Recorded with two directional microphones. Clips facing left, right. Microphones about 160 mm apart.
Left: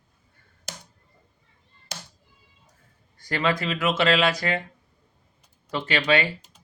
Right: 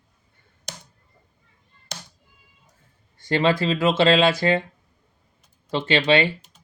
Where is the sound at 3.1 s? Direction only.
25° right (ahead or behind).